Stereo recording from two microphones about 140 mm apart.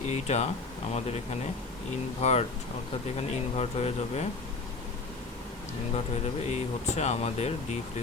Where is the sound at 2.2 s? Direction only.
50° left (ahead or behind).